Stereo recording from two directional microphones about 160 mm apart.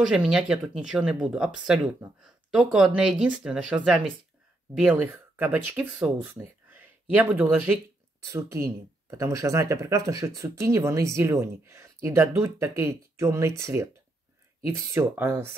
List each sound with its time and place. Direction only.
0.0 s speech: 5° right (ahead or behind)